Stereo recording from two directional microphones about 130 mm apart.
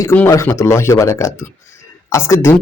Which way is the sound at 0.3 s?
20° left (ahead or behind).